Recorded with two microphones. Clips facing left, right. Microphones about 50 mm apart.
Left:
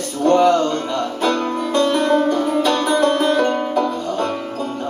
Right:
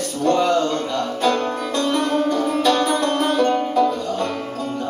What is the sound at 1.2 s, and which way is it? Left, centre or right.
Music, left.